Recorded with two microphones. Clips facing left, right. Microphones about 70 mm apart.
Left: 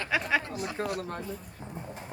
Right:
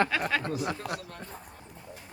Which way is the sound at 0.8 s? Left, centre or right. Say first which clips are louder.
Left 3 dB; left.